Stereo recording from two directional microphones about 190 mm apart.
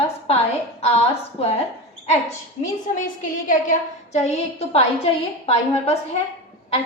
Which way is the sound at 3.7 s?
35° left (ahead or behind).